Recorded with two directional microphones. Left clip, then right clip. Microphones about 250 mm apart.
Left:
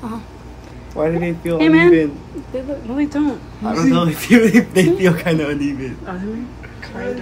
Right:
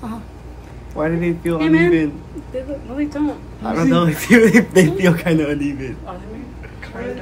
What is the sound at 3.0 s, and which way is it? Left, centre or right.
Speech, left.